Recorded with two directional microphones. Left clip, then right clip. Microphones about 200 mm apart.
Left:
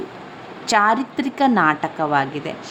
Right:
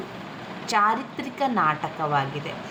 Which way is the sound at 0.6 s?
40° left (ahead or behind).